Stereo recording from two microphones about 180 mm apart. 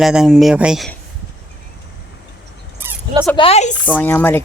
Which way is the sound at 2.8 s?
10° right (ahead or behind).